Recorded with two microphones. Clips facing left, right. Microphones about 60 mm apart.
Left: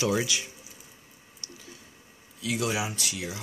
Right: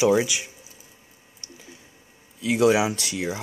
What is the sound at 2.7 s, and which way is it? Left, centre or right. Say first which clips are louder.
Speech: right 9 dB; right.